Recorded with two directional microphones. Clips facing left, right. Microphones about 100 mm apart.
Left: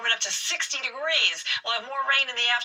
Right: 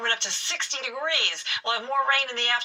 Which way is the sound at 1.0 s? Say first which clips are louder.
Left 2 dB; 25° right (ahead or behind).